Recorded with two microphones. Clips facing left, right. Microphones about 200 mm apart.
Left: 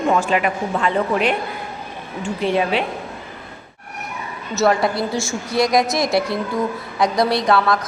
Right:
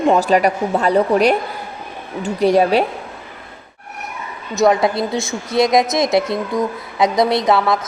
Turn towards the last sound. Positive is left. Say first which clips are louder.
# right 2 dB
turn(degrees=-20)  # may be behind; listen again after turning